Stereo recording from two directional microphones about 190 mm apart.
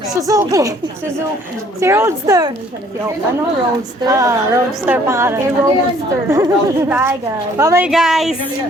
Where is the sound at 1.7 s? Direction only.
15° right (ahead or behind).